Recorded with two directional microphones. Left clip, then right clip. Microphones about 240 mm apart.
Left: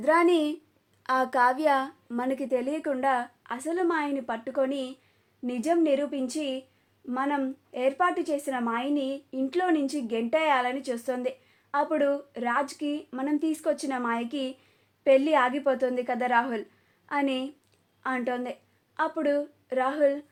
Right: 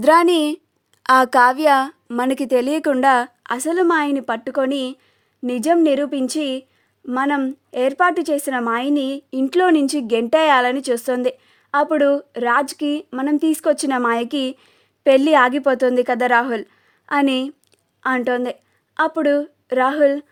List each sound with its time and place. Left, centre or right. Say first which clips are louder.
0.0 s a woman's voice: right 9 dB; right